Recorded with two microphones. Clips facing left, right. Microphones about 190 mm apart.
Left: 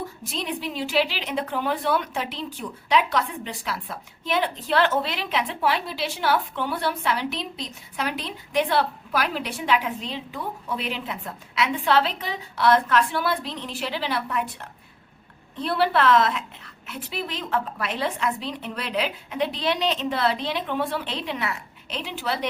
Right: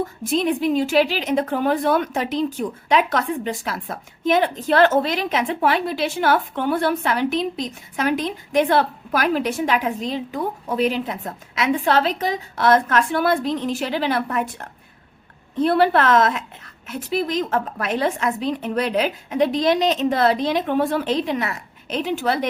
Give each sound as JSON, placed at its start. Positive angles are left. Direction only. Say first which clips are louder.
{"t": 0.0, "sound": "a woman's voice", "louder": "right 10 dB", "side_deg": -50}